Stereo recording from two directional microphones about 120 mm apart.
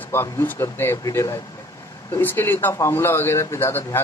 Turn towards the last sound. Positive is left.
turn(degrees=20)  # may be behind; listen again after turning